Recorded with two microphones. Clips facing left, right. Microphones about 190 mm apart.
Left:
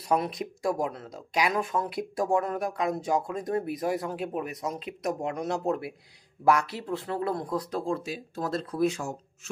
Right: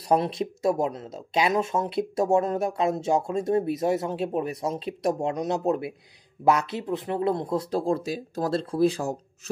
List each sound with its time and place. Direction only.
0.1 s speech: 30° right (ahead or behind)
5.3 s speech: 20° right (ahead or behind); by 9.2 s 35° right (ahead or behind)